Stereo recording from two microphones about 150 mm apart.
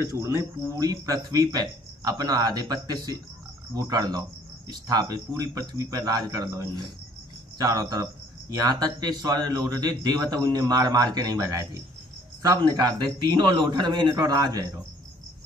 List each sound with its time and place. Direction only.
0.1 s speech: 20° right (ahead or behind)